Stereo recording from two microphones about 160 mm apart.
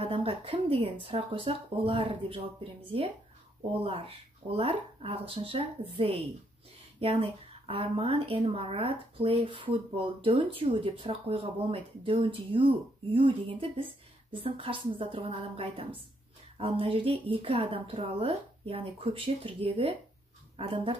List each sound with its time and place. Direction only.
0.0 s speech: 35° right (ahead or behind)
3.8 s speech: 35° right (ahead or behind)